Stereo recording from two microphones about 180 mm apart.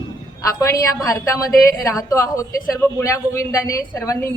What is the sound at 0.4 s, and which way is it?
A woman's voice, 15° left (ahead or behind).